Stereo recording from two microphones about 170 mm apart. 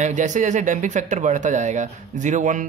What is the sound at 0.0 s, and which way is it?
Speech, 45° right (ahead or behind).